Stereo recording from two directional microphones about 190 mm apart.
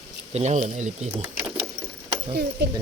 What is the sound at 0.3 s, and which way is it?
Speech, 35° right (ahead or behind).